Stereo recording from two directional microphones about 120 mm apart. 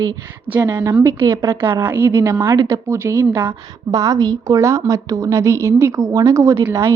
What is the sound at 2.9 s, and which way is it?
A woman's voice, 25° right (ahead or behind).